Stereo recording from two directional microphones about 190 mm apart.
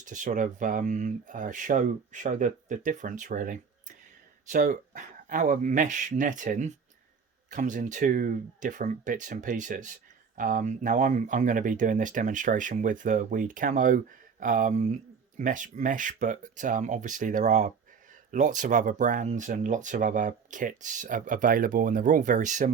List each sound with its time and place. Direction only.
0.0 s speech: 40° right (ahead or behind)